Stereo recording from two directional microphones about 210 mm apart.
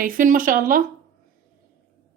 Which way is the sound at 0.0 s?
40° right (ahead or behind).